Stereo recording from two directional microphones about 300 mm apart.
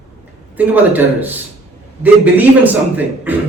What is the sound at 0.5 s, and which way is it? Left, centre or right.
A man's voice, centre.